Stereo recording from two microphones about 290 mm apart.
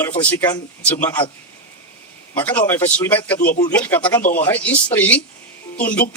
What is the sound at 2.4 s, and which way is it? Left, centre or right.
A man's voice, centre.